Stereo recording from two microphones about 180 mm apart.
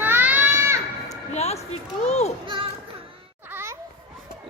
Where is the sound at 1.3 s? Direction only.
40° left (ahead or behind).